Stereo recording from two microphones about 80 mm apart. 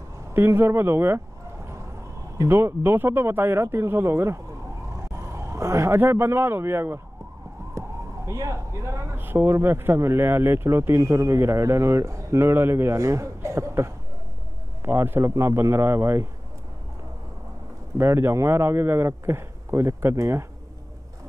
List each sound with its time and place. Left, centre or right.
0.3 s speech: right
2.3 s speech: right
7.8 s police car: right
8.3 s speech: right
9.2 s speech: right
17.9 s speech: right